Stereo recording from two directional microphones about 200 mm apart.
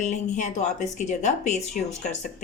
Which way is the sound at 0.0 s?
35° left (ahead or behind).